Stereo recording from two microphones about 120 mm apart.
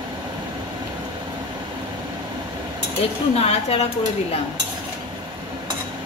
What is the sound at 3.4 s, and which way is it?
Speech, 60° left (ahead or behind).